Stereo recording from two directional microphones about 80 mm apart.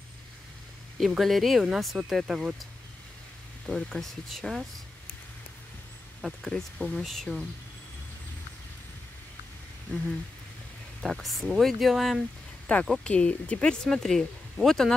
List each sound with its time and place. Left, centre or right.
0.9 s speech: centre
3.6 s speech: centre
6.2 s speech: centre
11.0 s speech: centre
12.7 s speech: centre